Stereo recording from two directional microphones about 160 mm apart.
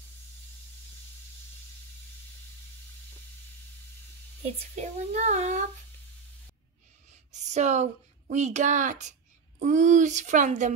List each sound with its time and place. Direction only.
4.7 s a woman's voice: 45° right (ahead or behind)
7.3 s a woman's voice: 45° right (ahead or behind)